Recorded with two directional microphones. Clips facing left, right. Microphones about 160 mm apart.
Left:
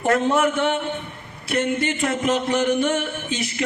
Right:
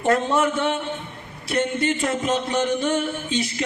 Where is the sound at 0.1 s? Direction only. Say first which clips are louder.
Left 1 dB; 35° right (ahead or behind).